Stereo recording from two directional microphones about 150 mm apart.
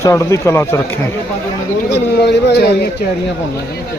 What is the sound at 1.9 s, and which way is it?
Speech, 90° left.